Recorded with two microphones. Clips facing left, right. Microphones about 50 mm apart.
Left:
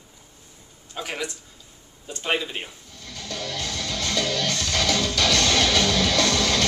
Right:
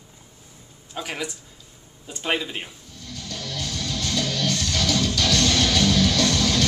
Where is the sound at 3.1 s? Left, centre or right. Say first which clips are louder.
Left 2 dB; left.